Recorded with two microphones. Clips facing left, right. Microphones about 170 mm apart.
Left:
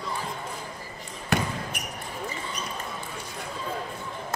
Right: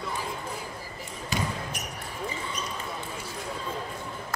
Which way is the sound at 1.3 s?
60° left (ahead or behind).